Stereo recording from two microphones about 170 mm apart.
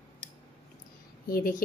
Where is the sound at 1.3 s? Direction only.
60° left (ahead or behind).